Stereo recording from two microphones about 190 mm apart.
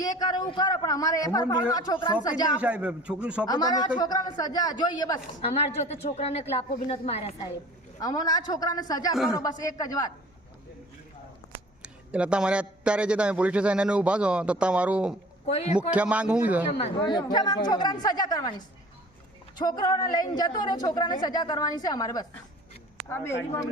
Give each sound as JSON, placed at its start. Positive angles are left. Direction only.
{"t": 0.0, "sound": "a woman's voice", "side_deg": 20}
{"t": 2.6, "sound": "speech", "side_deg": -5}
{"t": 3.5, "sound": "a woman's voice", "side_deg": 20}
{"t": 5.4, "sound": "speech", "side_deg": 35}
{"t": 8.0, "sound": "a woman's voice", "side_deg": 20}
{"t": 11.8, "sound": "a man's voice", "side_deg": -5}
{"t": 15.4, "sound": "speech", "side_deg": 35}
{"t": 15.7, "sound": "speech", "side_deg": -5}
{"t": 16.7, "sound": "a woman's voice", "side_deg": 25}
{"t": 19.5, "sound": "a woman's voice", "side_deg": 20}